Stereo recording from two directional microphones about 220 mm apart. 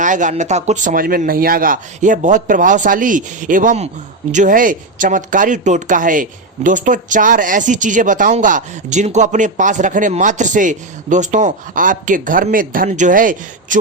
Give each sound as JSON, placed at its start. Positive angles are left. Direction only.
{"t": 0.0, "sound": "speech", "side_deg": -35}